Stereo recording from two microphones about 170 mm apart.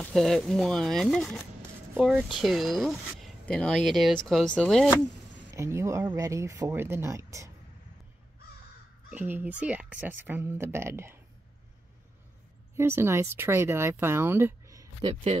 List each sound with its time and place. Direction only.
0.0 s speech: centre (ahead or behind)
5.5 s speech: 15° right (ahead or behind)
9.1 s speech: 10° right (ahead or behind)
12.7 s speech: 15° right (ahead or behind)